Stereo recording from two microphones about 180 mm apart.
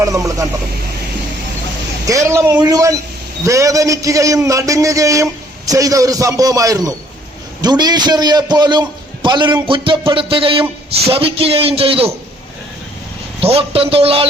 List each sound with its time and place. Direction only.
0.0 s a man's voice: 20° right (ahead or behind)
2.0 s a man's voice: 15° right (ahead or behind); by 12.1 s 30° right (ahead or behind)
13.4 s speech: 30° right (ahead or behind)